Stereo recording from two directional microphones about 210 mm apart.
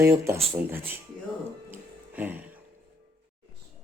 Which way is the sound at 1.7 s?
10° right (ahead or behind).